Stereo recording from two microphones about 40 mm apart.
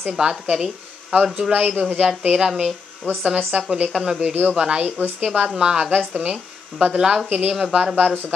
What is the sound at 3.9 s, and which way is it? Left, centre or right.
Speech, centre.